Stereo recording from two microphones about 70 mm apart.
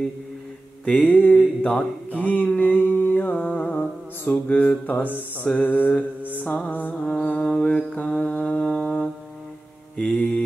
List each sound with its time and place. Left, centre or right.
0.8 s mantra: centre
10.1 s mantra: left